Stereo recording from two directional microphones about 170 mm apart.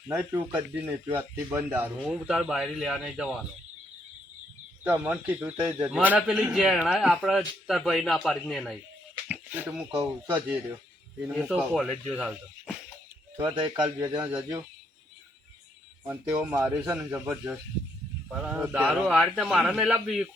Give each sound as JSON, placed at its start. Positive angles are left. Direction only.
{"t": 0.1, "sound": "speech", "side_deg": -15}
{"t": 2.0, "sound": "a man's voice", "side_deg": 0}
{"t": 4.8, "sound": "a man's voice", "side_deg": -10}
{"t": 13.3, "sound": "a man's voice", "side_deg": -25}
{"t": 16.4, "sound": "a man's voice", "side_deg": -10}